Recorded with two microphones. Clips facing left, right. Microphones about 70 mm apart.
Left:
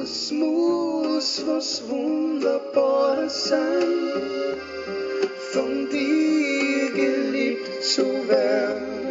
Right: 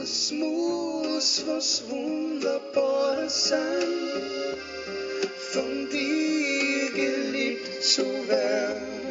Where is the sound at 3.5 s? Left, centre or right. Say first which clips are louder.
Left 5 dB; left.